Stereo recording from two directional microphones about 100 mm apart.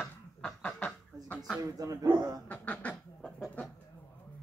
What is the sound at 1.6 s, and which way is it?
Speech, 35° right (ahead or behind).